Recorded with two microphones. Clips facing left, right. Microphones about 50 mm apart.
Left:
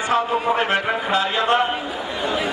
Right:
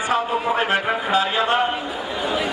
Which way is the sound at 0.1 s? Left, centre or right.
Centre.